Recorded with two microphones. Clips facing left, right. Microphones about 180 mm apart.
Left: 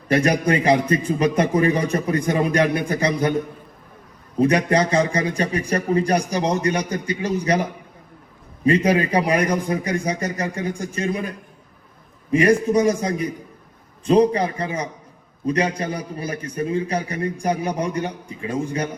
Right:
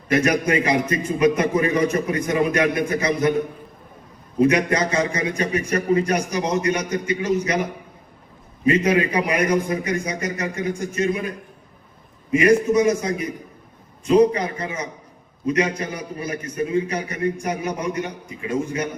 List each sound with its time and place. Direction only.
0.1 s a man's voice: 30° left (ahead or behind)
4.4 s a man's voice: 30° left (ahead or behind)
8.6 s a man's voice: 35° left (ahead or behind)
12.3 s a man's voice: 30° left (ahead or behind)